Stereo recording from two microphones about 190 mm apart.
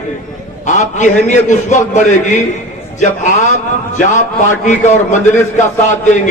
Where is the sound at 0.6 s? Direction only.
40° left (ahead or behind).